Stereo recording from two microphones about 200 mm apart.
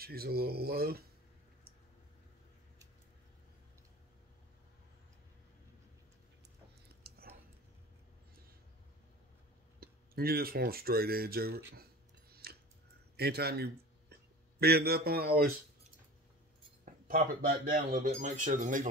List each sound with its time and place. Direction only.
0.0 s speech: 50° right (ahead or behind)
7.0 s a sound: 50° right (ahead or behind)
9.8 s speech: 50° right (ahead or behind)
11.7 s a sound: 50° right (ahead or behind)
13.1 s speech: 55° right (ahead or behind)
16.8 s speech: 45° right (ahead or behind)